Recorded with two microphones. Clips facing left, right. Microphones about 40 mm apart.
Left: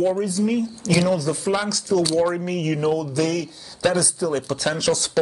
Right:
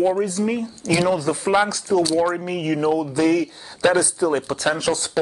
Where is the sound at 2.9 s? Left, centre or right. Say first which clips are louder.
Right 4 dB; right.